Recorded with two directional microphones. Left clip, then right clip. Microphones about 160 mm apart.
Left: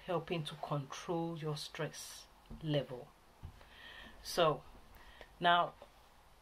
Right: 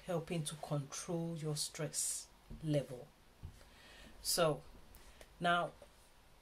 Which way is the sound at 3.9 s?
15° right (ahead or behind).